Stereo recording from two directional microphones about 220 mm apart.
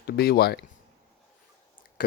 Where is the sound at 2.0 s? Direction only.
40° left (ahead or behind).